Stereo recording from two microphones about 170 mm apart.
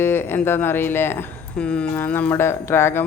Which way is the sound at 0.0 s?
15° left (ahead or behind).